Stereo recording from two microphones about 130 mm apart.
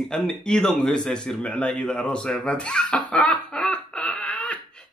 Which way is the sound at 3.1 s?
10° left (ahead or behind).